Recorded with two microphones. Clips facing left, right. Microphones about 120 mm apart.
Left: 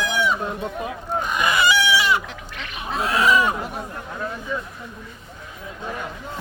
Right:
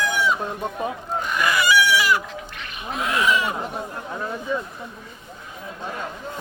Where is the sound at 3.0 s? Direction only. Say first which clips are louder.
Left 3 dB; 35° left (ahead or behind).